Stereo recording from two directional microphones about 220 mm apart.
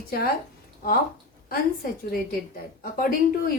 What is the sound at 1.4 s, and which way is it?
A woman's voice, 40° left (ahead or behind).